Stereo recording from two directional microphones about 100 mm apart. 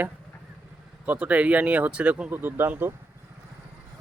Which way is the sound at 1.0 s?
15° right (ahead or behind).